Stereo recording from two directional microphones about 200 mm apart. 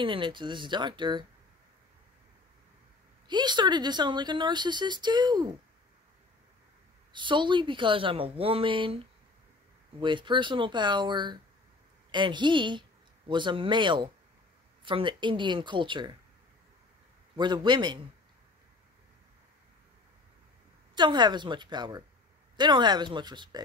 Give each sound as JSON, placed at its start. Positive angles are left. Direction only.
{"t": 0.0, "sound": "speech", "side_deg": -25}
{"t": 3.3, "sound": "speech", "side_deg": -20}
{"t": 7.1, "sound": "speech", "side_deg": -25}
{"t": 9.9, "sound": "speech", "side_deg": -25}
{"t": 17.4, "sound": "speech", "side_deg": -20}
{"t": 20.9, "sound": "speech", "side_deg": -20}